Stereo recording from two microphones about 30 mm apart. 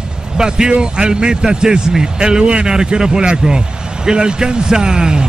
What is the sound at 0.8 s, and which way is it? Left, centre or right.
A man's voice, right.